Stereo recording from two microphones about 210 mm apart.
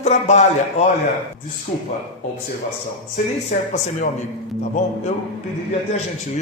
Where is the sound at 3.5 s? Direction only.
40° left (ahead or behind).